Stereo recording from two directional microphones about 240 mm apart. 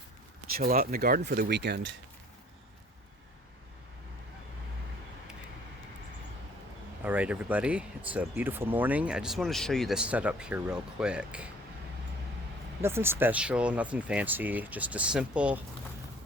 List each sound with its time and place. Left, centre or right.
0.5 s speech: right
7.0 s speech: centre
12.8 s speech: centre